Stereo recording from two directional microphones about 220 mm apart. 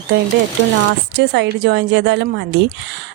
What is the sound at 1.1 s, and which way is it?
A woman's voice, 50° right (ahead or behind).